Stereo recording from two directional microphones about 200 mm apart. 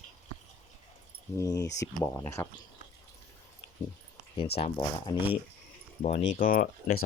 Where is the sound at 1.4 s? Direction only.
15° left (ahead or behind).